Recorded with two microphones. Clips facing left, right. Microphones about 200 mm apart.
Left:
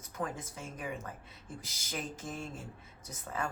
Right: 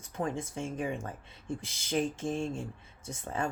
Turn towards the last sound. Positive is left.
turn(degrees=-30)  # may be behind; listen again after turning